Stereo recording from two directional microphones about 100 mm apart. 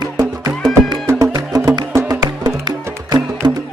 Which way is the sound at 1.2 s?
35° right (ahead or behind).